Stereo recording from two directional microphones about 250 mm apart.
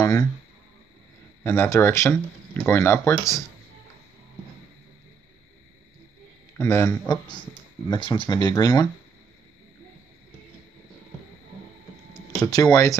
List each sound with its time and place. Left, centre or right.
0.0 s speech: centre
1.4 s speech: centre
6.6 s speech: centre
12.4 s speech: centre